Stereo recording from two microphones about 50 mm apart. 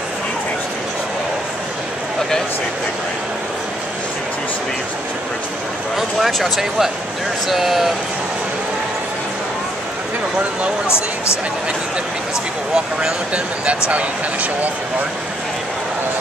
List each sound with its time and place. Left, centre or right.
5.9 s speech: centre
12.7 s speech: centre
13.8 s speech: right